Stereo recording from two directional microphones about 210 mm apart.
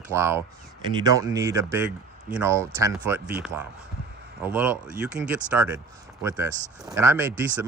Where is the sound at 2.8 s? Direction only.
15° right (ahead or behind).